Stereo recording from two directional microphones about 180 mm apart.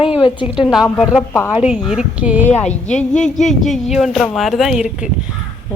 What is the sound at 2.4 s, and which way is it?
Speech, 10° left (ahead or behind).